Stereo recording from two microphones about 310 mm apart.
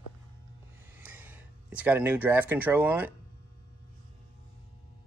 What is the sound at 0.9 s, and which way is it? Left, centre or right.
Speech, centre.